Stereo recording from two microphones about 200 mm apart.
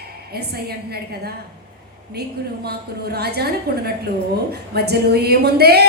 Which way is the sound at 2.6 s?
50° right (ahead or behind).